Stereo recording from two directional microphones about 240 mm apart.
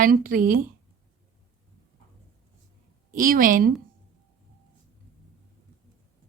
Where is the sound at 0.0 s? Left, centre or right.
Right.